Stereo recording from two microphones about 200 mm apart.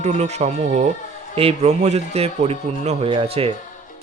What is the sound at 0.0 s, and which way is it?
Speech, 35° right (ahead or behind).